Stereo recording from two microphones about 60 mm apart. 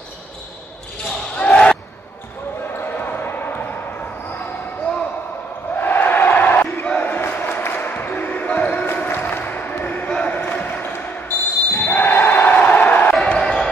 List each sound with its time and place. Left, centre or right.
1.3 s basketball bounce: centre
2.8 s basketball bounce: left
5.8 s a sound: left
10.3 s basketball bounce: left
12.5 s a sound: left
13.1 s basketball bounce: centre